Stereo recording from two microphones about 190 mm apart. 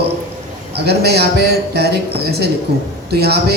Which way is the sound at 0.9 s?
60° right (ahead or behind).